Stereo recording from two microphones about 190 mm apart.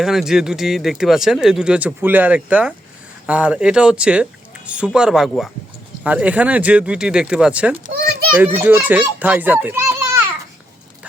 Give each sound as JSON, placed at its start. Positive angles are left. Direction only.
{"t": 0.0, "sound": "speech", "side_deg": 0}
{"t": 7.9, "sound": "children playing", "side_deg": -50}
{"t": 8.4, "sound": "speech", "side_deg": -10}